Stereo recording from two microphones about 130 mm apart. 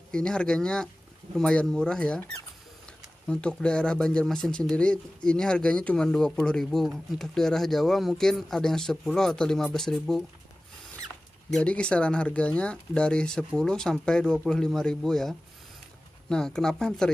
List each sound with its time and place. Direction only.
0.1 s speech: 5° left (ahead or behind)
3.3 s speech: 5° left (ahead or behind)
11.5 s speech: 10° left (ahead or behind)